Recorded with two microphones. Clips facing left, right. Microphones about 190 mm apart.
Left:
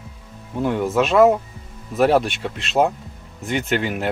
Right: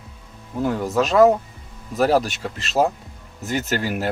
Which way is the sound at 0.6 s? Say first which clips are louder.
Left 1 dB; centre (ahead or behind).